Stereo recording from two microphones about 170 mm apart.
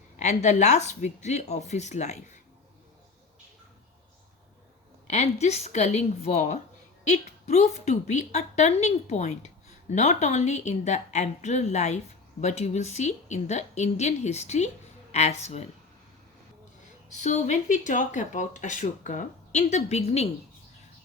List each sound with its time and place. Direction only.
0.2 s a woman's voice: 45° left (ahead or behind)
5.0 s a woman's voice: 40° left (ahead or behind)
17.1 s a woman's voice: 45° left (ahead or behind)